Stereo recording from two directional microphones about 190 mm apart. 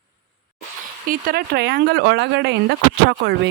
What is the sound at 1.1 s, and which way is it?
Speech, 50° right (ahead or behind).